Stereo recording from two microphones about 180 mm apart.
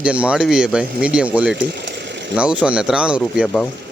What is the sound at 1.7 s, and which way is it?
Engine, 70° right (ahead or behind).